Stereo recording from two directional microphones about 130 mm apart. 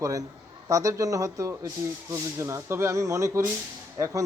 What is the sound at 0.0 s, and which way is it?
A man's voice, 25° right (ahead or behind).